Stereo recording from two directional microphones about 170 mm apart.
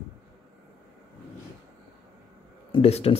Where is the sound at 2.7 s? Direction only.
35° left (ahead or behind).